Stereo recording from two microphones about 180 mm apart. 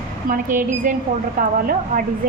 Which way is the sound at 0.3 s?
45° right (ahead or behind).